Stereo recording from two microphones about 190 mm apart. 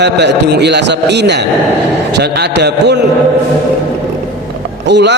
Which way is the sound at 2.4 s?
60° right (ahead or behind).